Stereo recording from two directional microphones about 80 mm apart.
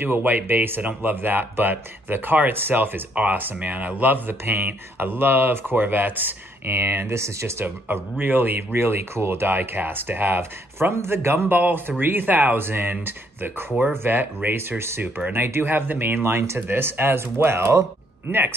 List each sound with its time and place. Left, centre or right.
0.0 s speech: right